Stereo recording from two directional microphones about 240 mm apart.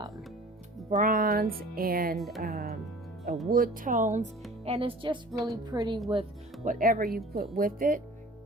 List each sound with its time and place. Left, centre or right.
0.9 s speech: right
2.1 s speech: centre
2.4 s speech: right; by 6.0 s centre
6.7 s speech: right